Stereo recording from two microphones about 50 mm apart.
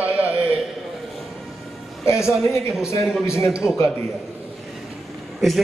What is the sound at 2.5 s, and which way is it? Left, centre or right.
A man's voice, left.